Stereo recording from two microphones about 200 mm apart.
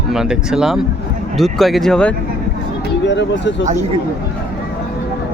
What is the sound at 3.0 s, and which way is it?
Speech, 60° left (ahead or behind).